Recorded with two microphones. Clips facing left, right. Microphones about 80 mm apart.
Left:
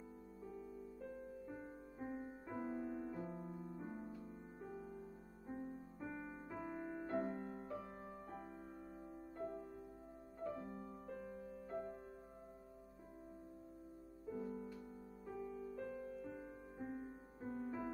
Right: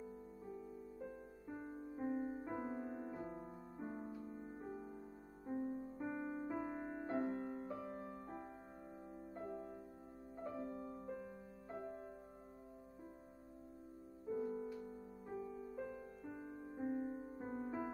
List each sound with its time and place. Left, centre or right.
0.5 s music: centre
7.2 s music: centre
9.4 s music: centre
10.6 s music: centre
14.3 s music: centre
15.2 s music: right